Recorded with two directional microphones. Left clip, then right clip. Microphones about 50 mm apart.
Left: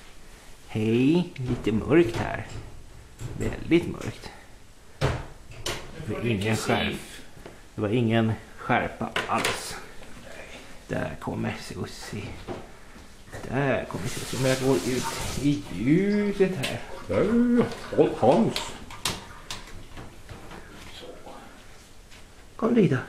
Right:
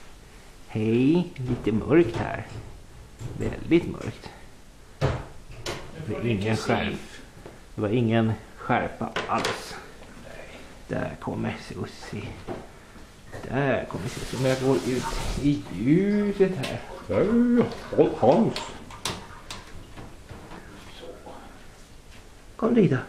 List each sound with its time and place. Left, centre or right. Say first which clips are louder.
0.7 s speech: right 1 dB; left
5.0 s cupboard open or close: even; left
5.8 s speech: even; left
10.9 s speech: even; left
15.4 s speech: right 1 dB; centre
19.4 s cupboard open or close: left 1 dB; left
22.6 s speech: right 1 dB; left